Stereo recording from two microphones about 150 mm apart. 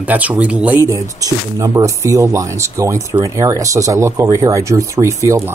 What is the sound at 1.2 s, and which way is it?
Speech, 20° right (ahead or behind).